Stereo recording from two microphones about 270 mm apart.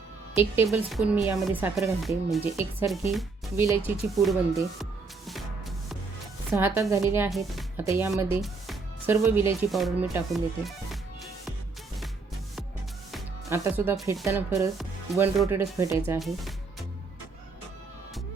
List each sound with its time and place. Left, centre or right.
0.3 s speech: centre
4.8 s music: centre
6.5 s speech: centre
13.5 s speech: centre
16.2 s speech: centre